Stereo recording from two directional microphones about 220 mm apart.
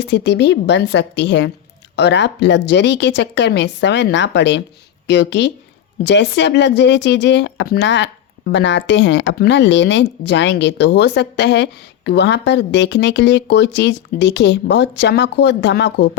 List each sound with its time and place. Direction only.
0.0 s speech: 50° left (ahead or behind)